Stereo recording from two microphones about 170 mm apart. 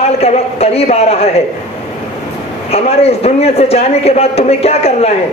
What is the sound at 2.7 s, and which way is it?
Speech, 35° left (ahead or behind).